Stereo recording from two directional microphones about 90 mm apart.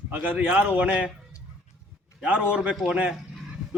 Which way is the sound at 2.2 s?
15° right (ahead or behind).